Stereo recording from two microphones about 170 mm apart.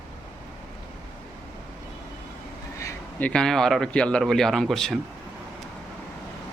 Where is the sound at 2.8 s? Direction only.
20° left (ahead or behind).